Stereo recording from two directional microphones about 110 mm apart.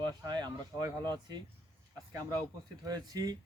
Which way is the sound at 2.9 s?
35° right (ahead or behind).